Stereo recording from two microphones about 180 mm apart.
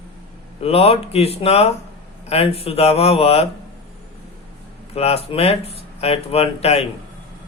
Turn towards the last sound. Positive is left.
turn(degrees=35)  # may be behind; listen again after turning